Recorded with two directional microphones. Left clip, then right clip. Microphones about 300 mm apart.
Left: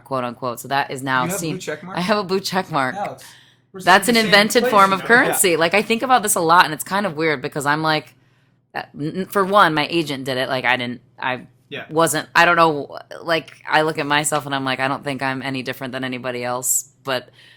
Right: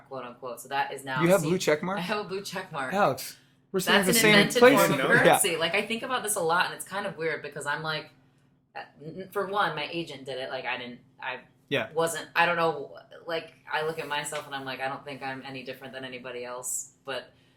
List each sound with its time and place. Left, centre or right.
0.1 s speech: left
1.2 s speech: right
2.0 s a woman's voice: left